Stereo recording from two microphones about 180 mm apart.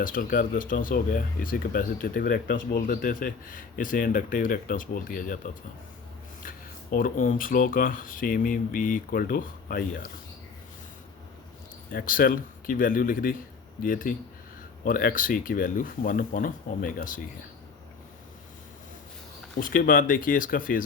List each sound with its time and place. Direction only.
0.0 s speech: 50° left (ahead or behind)
6.9 s speech: 50° left (ahead or behind)
11.9 s speech: 50° left (ahead or behind)
19.5 s speech: 50° left (ahead or behind)